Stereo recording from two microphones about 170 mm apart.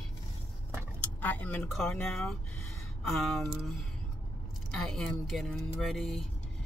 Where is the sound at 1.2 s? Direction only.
10° left (ahead or behind).